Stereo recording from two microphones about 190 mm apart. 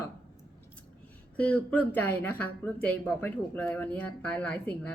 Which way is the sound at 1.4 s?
5° left (ahead or behind).